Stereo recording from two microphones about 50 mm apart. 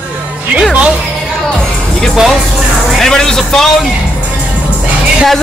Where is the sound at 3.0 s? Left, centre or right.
Centre.